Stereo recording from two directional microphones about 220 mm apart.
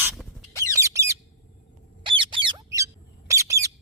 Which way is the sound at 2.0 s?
20° right (ahead or behind).